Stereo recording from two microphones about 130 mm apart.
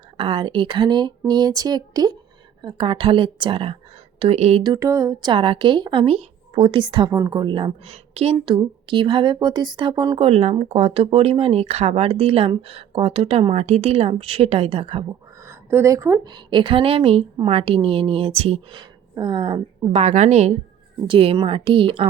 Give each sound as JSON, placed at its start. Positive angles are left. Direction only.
{"t": 0.2, "sound": "speech", "side_deg": -40}
{"t": 4.6, "sound": "a sound", "side_deg": -25}
{"t": 5.3, "sound": "speech", "side_deg": -40}
{"t": 7.9, "sound": "a woman's voice", "side_deg": -55}
{"t": 8.4, "sound": "speech", "side_deg": -40}
{"t": 10.2, "sound": "speech", "side_deg": -50}
{"t": 15.4, "sound": "speech", "side_deg": -20}
{"t": 16.3, "sound": "speech", "side_deg": -35}
{"t": 19.9, "sound": "a woman's voice", "side_deg": -60}
{"t": 21.1, "sound": "speech", "side_deg": -45}